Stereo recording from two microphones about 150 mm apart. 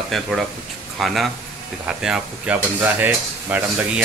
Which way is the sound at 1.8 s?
5° right (ahead or behind).